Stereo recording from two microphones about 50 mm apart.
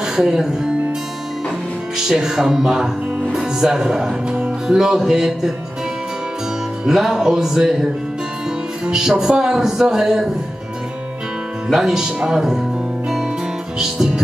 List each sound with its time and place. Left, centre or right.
0.0 s speech: centre
2.0 s speech: centre
6.9 s speech: centre
8.8 s music: centre
9.4 s speech: centre
11.7 s speech: centre
13.7 s music: centre